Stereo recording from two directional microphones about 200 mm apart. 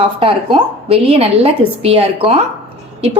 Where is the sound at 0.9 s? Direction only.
30° right (ahead or behind).